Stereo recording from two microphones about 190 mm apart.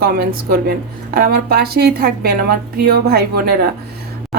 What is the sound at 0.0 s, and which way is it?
A woman's voice, 50° right (ahead or behind).